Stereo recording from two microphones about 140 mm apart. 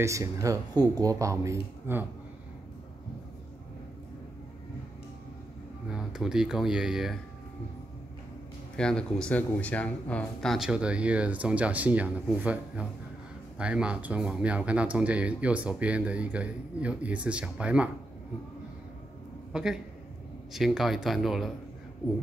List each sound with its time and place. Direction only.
0.0 s speech: 20° right (ahead or behind)
5.9 s speech: 5° right (ahead or behind)
8.7 s speech: 5° left (ahead or behind)
19.5 s a man's voice: 5° right (ahead or behind)